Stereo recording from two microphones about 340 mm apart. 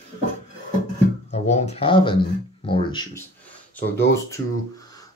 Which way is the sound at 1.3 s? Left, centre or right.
Centre.